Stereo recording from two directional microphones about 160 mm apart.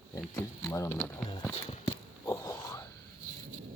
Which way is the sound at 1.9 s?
15° left (ahead or behind).